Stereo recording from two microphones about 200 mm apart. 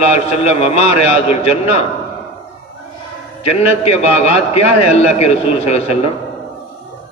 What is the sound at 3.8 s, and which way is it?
A man's voice, 30° left (ahead or behind).